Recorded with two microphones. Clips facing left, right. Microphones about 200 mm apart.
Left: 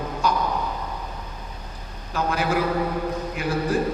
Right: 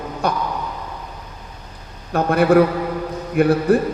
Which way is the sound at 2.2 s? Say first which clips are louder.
Right 10 dB; 55° right (ahead or behind).